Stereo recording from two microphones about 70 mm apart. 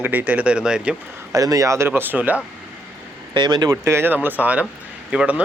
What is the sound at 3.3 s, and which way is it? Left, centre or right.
Speech, right.